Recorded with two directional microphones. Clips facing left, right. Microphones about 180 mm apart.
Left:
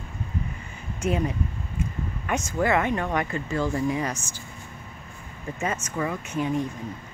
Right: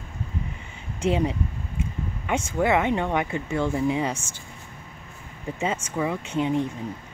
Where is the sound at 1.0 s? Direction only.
25° right (ahead or behind).